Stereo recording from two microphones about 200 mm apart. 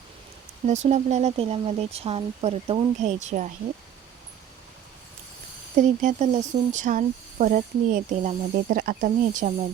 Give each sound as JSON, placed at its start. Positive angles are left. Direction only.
{"t": 0.6, "sound": "speech", "side_deg": -35}
{"t": 5.7, "sound": "speech", "side_deg": -40}